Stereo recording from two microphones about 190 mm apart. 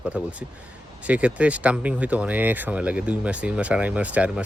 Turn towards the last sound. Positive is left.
turn(degrees=-5)  # may be behind; listen again after turning